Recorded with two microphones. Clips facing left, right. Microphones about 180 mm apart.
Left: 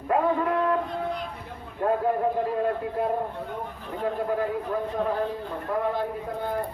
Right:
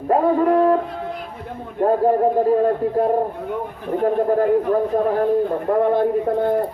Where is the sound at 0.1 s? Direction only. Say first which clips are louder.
Right 8 dB; 35° right (ahead or behind).